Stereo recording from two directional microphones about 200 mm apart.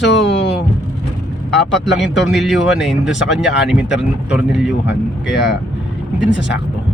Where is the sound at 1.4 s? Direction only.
Centre (ahead or behind).